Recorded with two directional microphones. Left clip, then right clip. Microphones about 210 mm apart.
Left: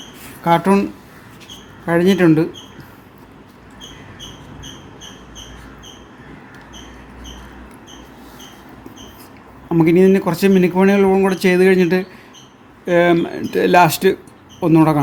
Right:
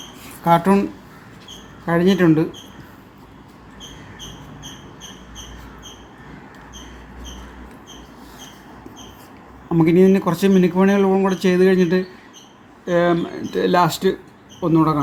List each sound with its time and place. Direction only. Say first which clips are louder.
0.4 s speech: left 1 dB; 5° left (ahead or behind)
1.9 s speech: left 3 dB; 10° left (ahead or behind)
9.6 s speech: left 2 dB; 10° left (ahead or behind); by 15.0 s 30° left (ahead or behind)